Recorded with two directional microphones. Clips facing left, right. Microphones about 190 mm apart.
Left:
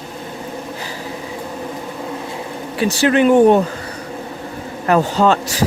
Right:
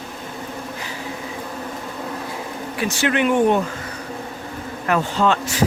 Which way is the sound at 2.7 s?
30° left (ahead or behind).